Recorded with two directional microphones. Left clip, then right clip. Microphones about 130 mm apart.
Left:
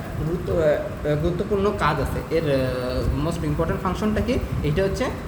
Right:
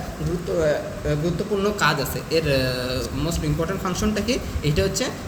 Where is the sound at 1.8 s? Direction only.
25° right (ahead or behind).